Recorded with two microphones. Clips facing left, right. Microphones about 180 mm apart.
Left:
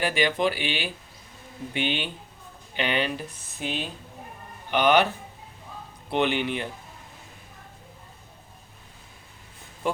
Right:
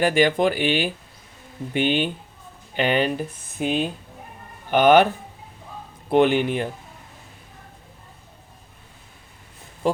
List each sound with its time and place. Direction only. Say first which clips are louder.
0.0 s speech: right 6 dB; 50° right (ahead or behind)
6.1 s speech: right 7 dB; 45° right (ahead or behind)
9.8 s speech: right 5 dB; 35° right (ahead or behind)